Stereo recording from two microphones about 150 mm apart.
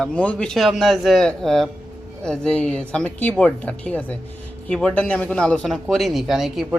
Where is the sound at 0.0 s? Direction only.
5° left (ahead or behind).